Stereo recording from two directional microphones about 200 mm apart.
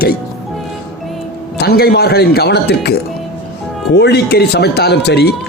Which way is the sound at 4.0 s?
55° left (ahead or behind).